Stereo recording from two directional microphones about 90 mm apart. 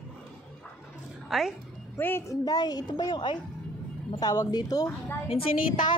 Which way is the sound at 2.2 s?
45° left (ahead or behind).